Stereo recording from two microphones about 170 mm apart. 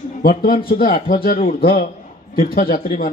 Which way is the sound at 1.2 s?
50° left (ahead or behind).